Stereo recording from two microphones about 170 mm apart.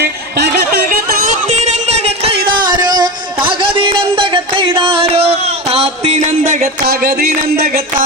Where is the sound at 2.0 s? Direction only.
35° right (ahead or behind); by 7.8 s 65° right (ahead or behind).